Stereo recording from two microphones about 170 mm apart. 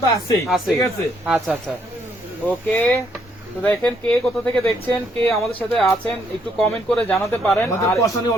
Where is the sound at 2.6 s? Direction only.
10° left (ahead or behind).